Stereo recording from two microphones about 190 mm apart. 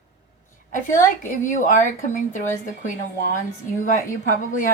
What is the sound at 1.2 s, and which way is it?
Speech, 40° left (ahead or behind).